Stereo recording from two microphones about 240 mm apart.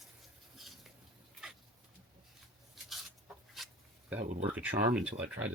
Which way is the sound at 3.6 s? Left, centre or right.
Centre.